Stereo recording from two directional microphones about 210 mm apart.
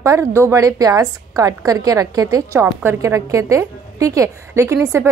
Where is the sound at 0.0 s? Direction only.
15° right (ahead or behind).